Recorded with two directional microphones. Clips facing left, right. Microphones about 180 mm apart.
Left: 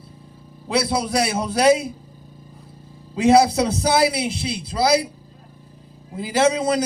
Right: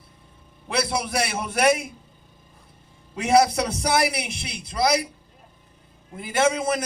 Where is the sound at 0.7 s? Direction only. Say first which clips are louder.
Left 4 dB; 25° left (ahead or behind).